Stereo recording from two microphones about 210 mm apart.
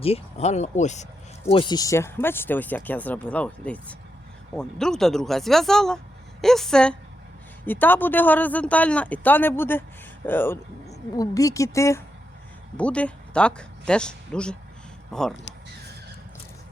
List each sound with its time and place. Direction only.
0.0 s speech: 30° left (ahead or behind)
1.5 s speech: 25° left (ahead or behind); by 15.4 s 5° left (ahead or behind)